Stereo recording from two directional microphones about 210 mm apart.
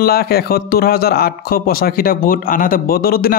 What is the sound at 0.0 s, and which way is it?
A man's voice, 45° left (ahead or behind).